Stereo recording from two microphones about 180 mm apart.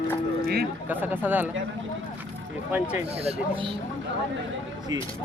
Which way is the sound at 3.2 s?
30° right (ahead or behind).